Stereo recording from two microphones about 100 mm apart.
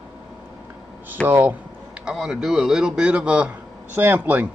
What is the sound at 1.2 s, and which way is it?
Speech, 20° right (ahead or behind).